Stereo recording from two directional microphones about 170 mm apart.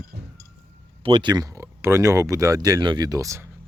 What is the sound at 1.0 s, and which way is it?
Speech, 30° right (ahead or behind).